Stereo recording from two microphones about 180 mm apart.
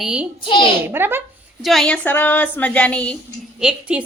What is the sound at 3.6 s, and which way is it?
Speech, 5° right (ahead or behind).